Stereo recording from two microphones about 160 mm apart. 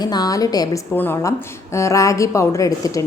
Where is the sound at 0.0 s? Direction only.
25° left (ahead or behind).